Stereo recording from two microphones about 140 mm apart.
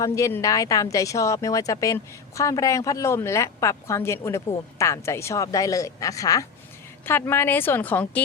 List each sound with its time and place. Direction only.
0.0 s a woman's voice: 25° left (ahead or behind)